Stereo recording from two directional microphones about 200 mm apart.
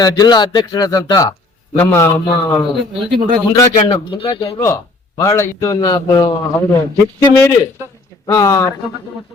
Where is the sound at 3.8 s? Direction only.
30° left (ahead or behind).